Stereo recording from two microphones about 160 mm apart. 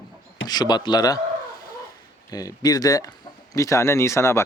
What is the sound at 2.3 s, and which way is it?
A man's voice, 25° left (ahead or behind).